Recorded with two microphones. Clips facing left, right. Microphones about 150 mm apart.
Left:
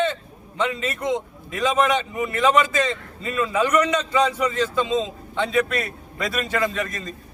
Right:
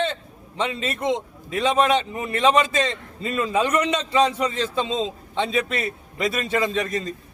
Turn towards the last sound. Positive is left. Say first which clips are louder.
# right 2 dB
turn(degrees=-25)  # may be behind; listen again after turning